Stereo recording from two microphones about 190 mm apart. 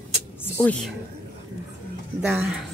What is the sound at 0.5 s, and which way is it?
Speech, 5° left (ahead or behind).